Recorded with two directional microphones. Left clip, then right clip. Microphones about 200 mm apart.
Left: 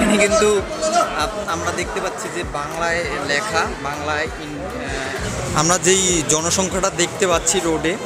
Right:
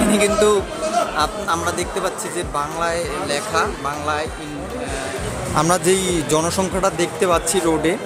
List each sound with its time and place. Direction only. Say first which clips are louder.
0.0 s speech: left 1 dB; 15° right (ahead or behind)
5.5 s speech: even; 10° right (ahead or behind)